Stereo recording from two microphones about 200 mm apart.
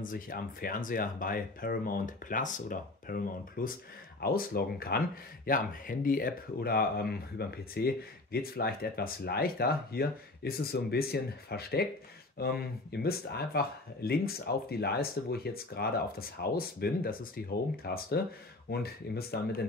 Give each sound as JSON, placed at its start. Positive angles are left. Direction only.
{"t": 0.0, "sound": "speech", "side_deg": 45}